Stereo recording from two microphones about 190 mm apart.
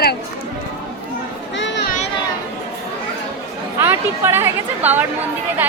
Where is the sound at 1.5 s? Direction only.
70° left (ahead or behind).